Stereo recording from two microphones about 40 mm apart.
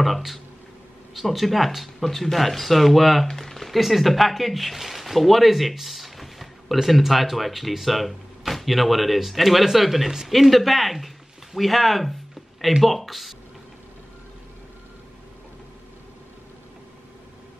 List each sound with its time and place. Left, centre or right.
0.0 s speech: centre